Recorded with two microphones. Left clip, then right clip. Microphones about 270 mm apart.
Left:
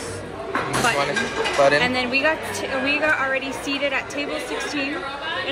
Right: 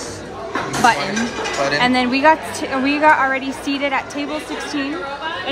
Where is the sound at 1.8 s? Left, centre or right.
Right.